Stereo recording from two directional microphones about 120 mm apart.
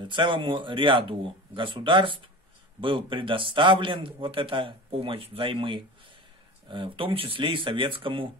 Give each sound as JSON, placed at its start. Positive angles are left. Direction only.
{"t": 0.1, "sound": "a man's voice", "side_deg": -45}